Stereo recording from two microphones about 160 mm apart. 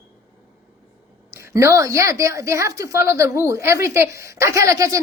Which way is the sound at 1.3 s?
15° right (ahead or behind).